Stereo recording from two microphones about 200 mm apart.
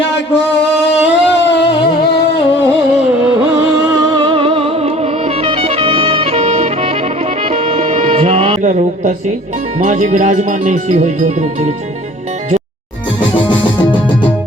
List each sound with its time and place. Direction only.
1.1 s a sound: 60° left (ahead or behind)
4.0 s music: 20° right (ahead or behind); by 9.1 s 40° right (ahead or behind)
9.8 s speech: 40° right (ahead or behind)
13.4 s music: 25° left (ahead or behind)